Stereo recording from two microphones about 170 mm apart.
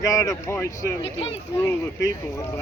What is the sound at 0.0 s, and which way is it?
Speech, 20° left (ahead or behind).